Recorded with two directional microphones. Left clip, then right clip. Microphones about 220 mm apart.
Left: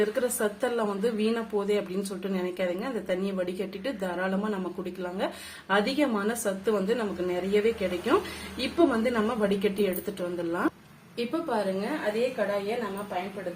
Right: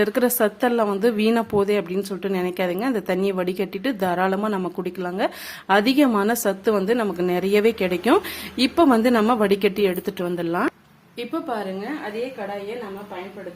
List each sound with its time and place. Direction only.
0.0 s a woman's voice: 45° right (ahead or behind)